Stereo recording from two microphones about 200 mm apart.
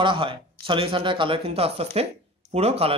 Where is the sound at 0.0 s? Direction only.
25° right (ahead or behind).